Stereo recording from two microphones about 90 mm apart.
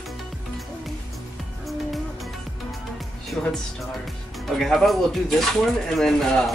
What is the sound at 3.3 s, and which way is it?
Speech, 20° left (ahead or behind).